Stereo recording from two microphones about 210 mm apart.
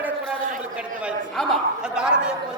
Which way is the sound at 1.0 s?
Centre (ahead or behind).